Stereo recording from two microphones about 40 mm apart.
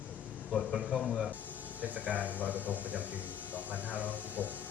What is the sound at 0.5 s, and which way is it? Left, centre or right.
Speech, centre.